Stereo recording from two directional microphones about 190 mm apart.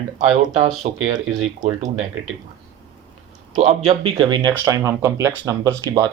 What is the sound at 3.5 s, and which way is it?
Speech, 35° right (ahead or behind).